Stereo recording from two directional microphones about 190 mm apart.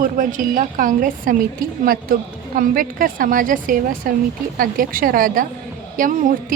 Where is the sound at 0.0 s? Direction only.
45° right (ahead or behind).